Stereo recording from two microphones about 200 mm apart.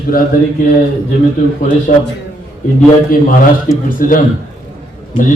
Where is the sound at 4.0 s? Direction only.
45° left (ahead or behind).